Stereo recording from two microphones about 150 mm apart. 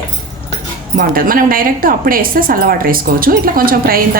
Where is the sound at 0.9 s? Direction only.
70° right (ahead or behind).